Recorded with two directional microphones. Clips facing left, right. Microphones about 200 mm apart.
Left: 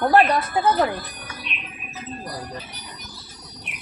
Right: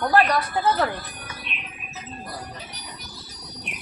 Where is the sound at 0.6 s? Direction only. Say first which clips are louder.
Left 3 dB; 15° left (ahead or behind).